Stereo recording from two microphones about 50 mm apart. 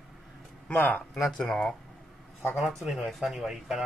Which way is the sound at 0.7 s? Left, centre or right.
Left.